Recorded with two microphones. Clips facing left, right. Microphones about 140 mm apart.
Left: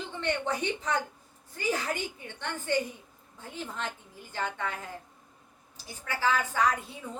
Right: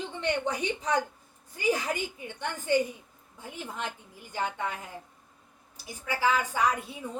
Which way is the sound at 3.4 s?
15° right (ahead or behind).